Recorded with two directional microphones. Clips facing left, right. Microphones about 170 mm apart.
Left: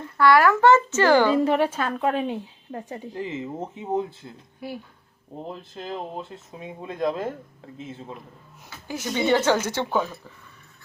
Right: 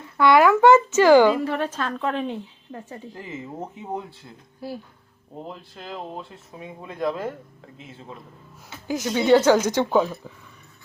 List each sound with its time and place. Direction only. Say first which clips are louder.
0.2 s speech: right 2 dB; 20° right (ahead or behind)
1.5 s a woman's voice: left 4 dB; 10° left (ahead or behind)
6.6 s speech: left 1 dB; 20° left (ahead or behind)
9.0 s speech: right 4 dB; 10° right (ahead or behind)